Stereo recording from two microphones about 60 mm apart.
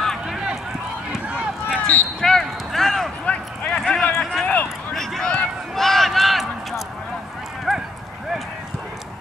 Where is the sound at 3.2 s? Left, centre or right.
Centre.